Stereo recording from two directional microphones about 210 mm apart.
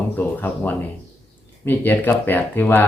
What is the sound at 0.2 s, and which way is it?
Speech, 10° left (ahead or behind).